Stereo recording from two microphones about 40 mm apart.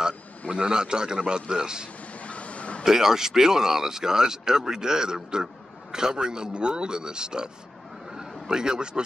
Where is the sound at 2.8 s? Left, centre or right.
Centre.